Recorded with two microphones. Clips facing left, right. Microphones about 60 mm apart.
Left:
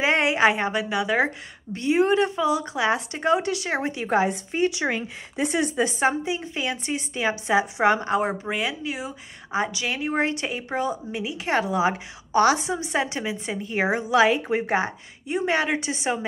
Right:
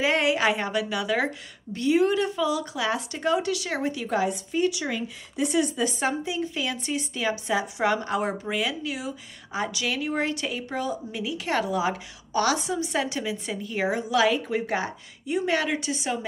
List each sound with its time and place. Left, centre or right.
0.0 s a woman's voice: left
5.9 s a woman's voice: left